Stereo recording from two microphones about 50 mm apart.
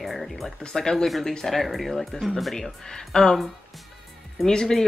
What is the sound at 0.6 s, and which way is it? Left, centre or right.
Speech, centre.